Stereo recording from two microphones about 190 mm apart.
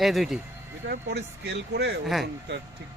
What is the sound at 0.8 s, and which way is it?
Speech, 60° right (ahead or behind).